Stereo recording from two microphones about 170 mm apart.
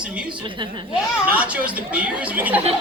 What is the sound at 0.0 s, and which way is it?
Speech, 5° right (ahead or behind).